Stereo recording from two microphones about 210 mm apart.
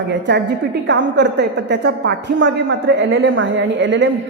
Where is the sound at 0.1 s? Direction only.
55° right (ahead or behind).